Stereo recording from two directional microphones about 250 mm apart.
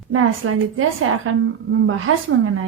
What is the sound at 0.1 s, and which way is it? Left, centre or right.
A woman's voice, right.